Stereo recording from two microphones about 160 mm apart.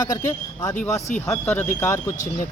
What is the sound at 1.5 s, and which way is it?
Speech, 10° left (ahead or behind).